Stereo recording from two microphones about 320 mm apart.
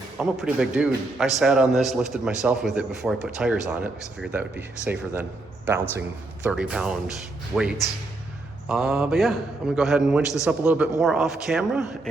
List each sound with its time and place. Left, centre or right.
0.2 s a man's voice: centre